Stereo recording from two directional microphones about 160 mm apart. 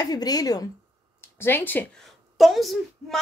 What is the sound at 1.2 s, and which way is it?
A woman's voice, 15° left (ahead or behind).